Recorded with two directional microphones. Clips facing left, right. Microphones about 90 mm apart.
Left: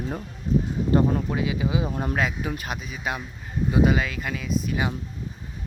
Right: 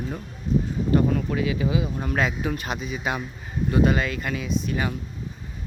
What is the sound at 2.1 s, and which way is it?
Speech, centre (ahead or behind).